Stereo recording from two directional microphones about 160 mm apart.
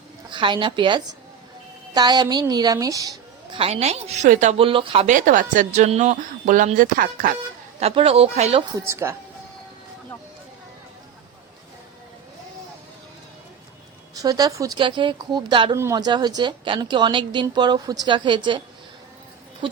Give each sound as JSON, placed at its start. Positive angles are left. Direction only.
{"t": 0.3, "sound": "a woman's voice", "side_deg": -30}
{"t": 3.6, "sound": "a woman's voice", "side_deg": -40}
{"t": 4.6, "sound": "a woman's voice", "side_deg": -35}
{"t": 5.0, "sound": "speech", "side_deg": -55}
{"t": 7.8, "sound": "a woman's voice", "side_deg": -40}
{"t": 8.7, "sound": "a woman's voice", "side_deg": -15}
{"t": 14.2, "sound": "a woman's voice", "side_deg": -25}